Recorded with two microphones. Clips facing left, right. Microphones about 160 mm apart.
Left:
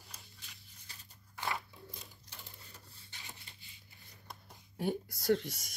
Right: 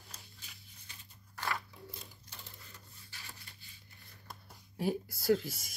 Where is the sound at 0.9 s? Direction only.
35° left (ahead or behind).